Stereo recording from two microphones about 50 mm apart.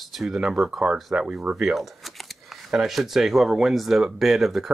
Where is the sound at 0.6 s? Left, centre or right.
Centre.